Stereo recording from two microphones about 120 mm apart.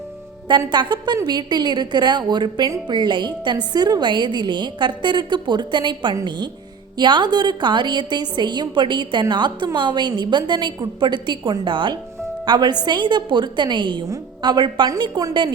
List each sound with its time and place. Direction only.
0.7 s a woman's voice: 40° right (ahead or behind)